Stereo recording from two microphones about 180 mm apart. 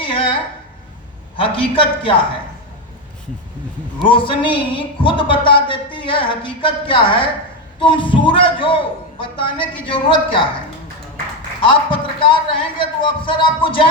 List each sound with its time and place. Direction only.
0.0 s a sound: 30° left (ahead or behind)
1.4 s speech: 30° left (ahead or behind)
4.0 s speech: 30° left (ahead or behind)
11.7 s speech: 30° left (ahead or behind)